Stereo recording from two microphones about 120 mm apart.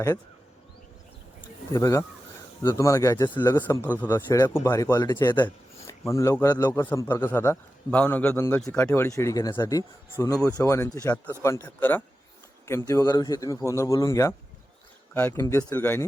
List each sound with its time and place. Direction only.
1.7 s a man's voice: 25° left (ahead or behind)
5.1 s speech: 35° left (ahead or behind)
5.9 s a man's voice: 25° left (ahead or behind)